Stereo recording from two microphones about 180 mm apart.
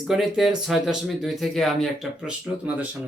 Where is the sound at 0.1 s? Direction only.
Centre (ahead or behind).